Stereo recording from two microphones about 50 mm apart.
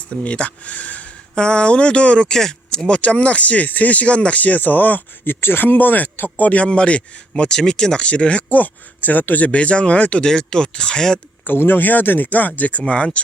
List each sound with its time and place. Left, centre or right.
0.2 s speech: left
1.4 s speech: centre
7.5 s speech: centre
8.4 s speech: left
10.2 s speech: centre
11.4 s speech: left